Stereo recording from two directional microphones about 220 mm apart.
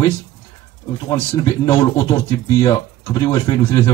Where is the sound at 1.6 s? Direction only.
15° left (ahead or behind).